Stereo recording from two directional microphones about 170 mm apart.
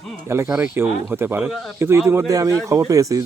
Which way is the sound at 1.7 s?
15° right (ahead or behind).